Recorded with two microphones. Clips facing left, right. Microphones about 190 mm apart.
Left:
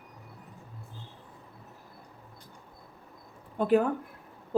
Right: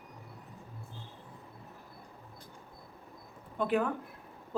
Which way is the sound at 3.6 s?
40° left (ahead or behind).